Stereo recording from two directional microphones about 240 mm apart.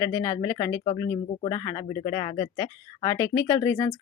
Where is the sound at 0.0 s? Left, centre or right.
Centre.